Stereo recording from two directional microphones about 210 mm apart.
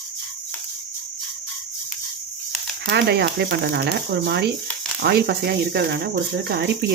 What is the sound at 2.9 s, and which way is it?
Speech, 50° right (ahead or behind).